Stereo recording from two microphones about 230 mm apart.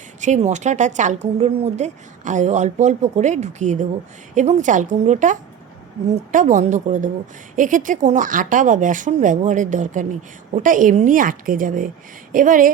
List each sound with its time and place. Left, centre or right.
0.2 s a woman's voice: right